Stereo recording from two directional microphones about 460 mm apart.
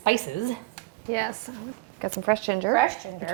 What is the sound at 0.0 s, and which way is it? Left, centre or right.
Speech, left.